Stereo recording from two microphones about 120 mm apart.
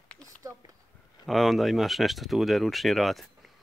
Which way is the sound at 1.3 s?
Centre (ahead or behind).